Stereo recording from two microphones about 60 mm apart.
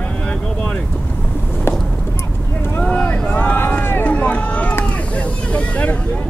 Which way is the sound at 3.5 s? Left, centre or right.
Left.